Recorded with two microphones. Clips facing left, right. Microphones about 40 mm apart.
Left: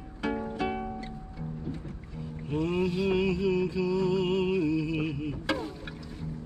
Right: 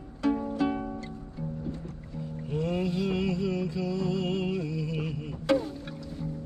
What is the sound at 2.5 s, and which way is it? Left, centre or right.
Music, centre.